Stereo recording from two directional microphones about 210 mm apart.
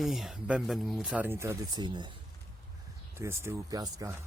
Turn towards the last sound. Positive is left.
turn(degrees=-15)  # may be behind; listen again after turning